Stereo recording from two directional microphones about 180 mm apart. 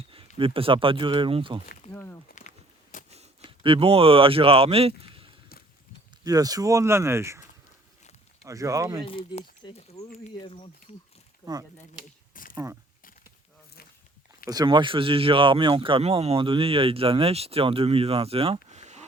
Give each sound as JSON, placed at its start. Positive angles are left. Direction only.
{"t": 0.1, "sound": "speech", "side_deg": -30}
{"t": 1.9, "sound": "speech", "side_deg": 10}
{"t": 2.4, "sound": "a sound", "side_deg": 40}
{"t": 3.1, "sound": "speech", "side_deg": -35}
{"t": 6.2, "sound": "speech", "side_deg": -20}
{"t": 8.4, "sound": "speech", "side_deg": -20}
{"t": 9.0, "sound": "speech", "side_deg": 30}
{"t": 12.3, "sound": "a sound", "side_deg": 50}
{"t": 14.4, "sound": "speech", "side_deg": -20}